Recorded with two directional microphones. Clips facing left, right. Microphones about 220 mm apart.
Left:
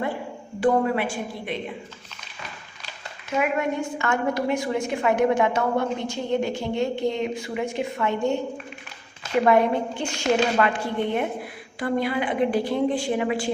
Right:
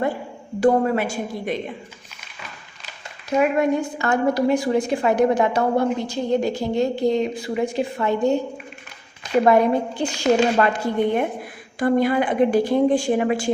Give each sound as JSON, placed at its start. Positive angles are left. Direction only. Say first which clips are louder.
{"t": 0.6, "sound": "a woman's voice", "louder": "right 3 dB", "side_deg": -40}
{"t": 3.2, "sound": "a woman's voice", "louder": "right 5 dB", "side_deg": -35}
{"t": 10.0, "sound": "a woman's voice", "louder": "right 4 dB", "side_deg": -40}